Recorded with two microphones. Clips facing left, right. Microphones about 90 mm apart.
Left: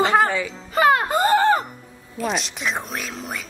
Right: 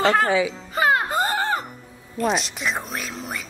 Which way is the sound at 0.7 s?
80° left.